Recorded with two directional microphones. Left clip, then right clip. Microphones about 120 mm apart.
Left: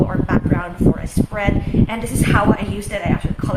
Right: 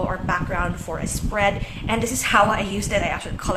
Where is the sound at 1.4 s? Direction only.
30° right (ahead or behind).